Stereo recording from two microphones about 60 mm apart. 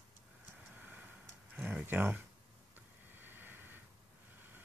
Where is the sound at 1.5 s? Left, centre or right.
Centre.